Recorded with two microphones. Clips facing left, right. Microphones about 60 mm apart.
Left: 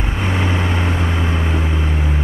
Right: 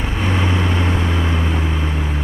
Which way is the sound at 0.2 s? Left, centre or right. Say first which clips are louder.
Right 1 dB; left.